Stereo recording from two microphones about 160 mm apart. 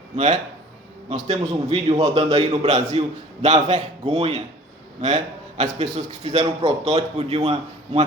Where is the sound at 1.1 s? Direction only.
45° right (ahead or behind).